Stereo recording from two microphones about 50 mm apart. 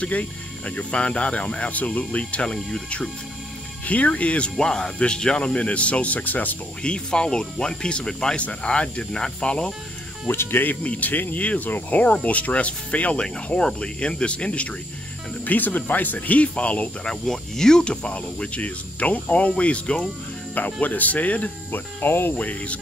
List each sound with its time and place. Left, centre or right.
0.0 s speech: left
3.8 s speech: left
4.6 s speech: centre; by 6.5 s left
6.8 s speech: centre
10.2 s speech: left
10.8 s speech: left
13.2 s speech: centre
15.4 s speech: left
17.0 s speech: centre; by 21.5 s left
21.7 s speech: left
22.4 s speech: left